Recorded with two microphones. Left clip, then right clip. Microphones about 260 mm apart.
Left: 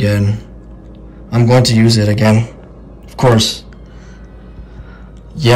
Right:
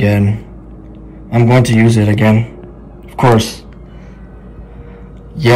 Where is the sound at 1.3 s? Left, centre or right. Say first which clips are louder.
Even; left.